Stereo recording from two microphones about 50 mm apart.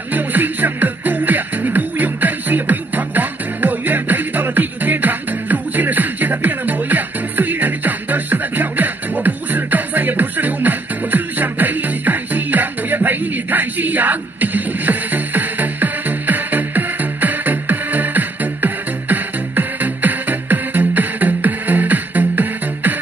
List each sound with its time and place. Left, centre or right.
0.1 s music: right